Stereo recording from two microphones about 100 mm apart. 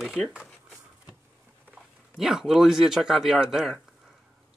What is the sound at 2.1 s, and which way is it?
Speech, 5° right (ahead or behind).